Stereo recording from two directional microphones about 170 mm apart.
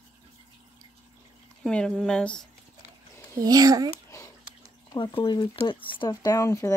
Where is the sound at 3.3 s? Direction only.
20° right (ahead or behind).